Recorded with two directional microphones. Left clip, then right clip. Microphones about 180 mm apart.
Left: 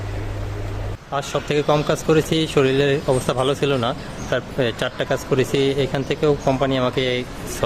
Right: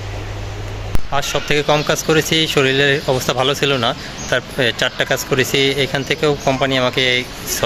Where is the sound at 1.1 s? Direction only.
10° left (ahead or behind).